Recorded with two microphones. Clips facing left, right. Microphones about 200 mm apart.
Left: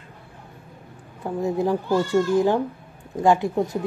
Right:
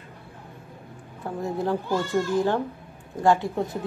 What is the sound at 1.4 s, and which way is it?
Speech, 15° left (ahead or behind).